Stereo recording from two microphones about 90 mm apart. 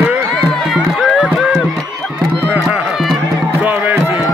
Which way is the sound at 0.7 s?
10° right (ahead or behind).